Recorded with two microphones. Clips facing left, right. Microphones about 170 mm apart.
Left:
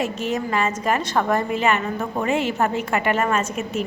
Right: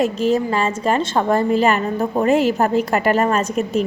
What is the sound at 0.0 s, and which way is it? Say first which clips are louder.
A woman's voice: right 7 dB; 35° right (ahead or behind).